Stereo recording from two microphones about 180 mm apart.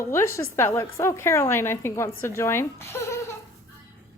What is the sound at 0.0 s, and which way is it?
A woman's voice, 15° left (ahead or behind).